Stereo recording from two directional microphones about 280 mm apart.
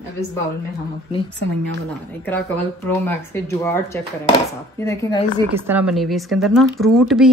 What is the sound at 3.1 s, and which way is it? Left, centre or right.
Speech, centre.